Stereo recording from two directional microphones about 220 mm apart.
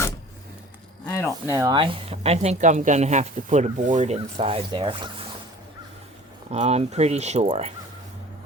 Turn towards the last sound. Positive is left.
turn(degrees=-30)  # may be behind; listen again after turning